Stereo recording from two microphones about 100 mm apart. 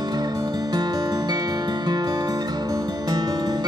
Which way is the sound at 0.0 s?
45° right (ahead or behind).